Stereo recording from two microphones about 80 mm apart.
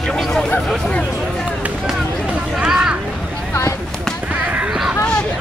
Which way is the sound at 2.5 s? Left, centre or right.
Centre.